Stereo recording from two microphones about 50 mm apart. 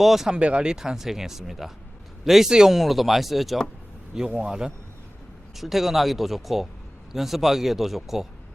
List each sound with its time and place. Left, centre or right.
0.0 s a man's voice: centre
0.3 s a man's voice: right; by 3.7 s centre
4.1 s a man's voice: centre